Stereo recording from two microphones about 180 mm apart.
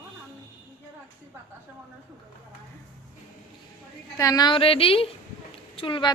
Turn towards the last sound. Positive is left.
turn(degrees=30)  # may be behind; listen again after turning